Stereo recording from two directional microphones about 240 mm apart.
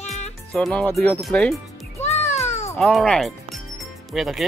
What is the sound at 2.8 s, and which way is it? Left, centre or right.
Speech, centre.